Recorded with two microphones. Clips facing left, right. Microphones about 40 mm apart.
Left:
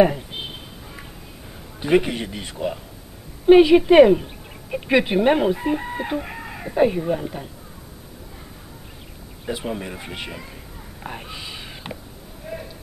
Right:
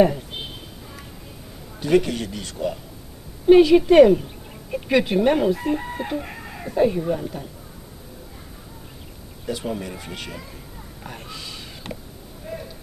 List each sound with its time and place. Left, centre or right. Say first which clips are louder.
1.8 s speech: even; left
9.5 s speech: even; centre
11.1 s a sound: left 3 dB; left